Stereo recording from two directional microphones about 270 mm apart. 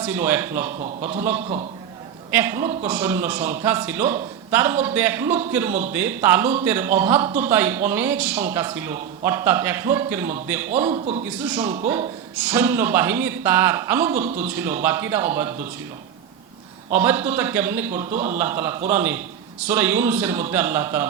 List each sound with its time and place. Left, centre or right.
0.0 s speech: centre
0.8 s speech: right
2.3 s speech: centre
10.9 s speech: right
11.4 s speech: centre
16.9 s speech: centre